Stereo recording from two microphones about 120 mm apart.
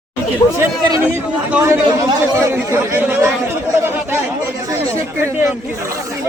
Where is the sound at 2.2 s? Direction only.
20° right (ahead or behind).